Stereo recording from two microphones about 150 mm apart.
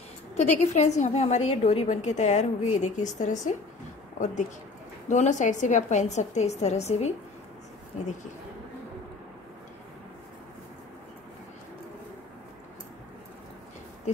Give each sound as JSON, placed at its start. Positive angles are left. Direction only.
{"t": 0.4, "sound": "a woman's voice", "side_deg": 50}
{"t": 5.0, "sound": "a woman's voice", "side_deg": 55}